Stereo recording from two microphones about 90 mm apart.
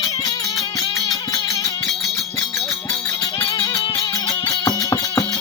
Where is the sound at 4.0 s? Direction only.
40° left (ahead or behind).